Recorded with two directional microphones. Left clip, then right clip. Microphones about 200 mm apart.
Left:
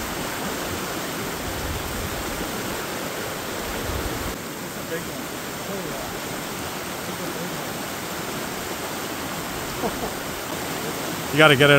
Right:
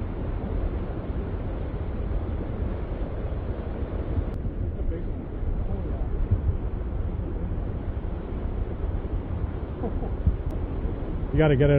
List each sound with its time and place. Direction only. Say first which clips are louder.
11.3 s speech: left 8 dB; 20° left (ahead or behind)